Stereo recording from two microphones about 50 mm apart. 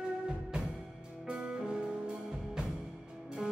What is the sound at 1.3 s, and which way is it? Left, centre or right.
Music, centre.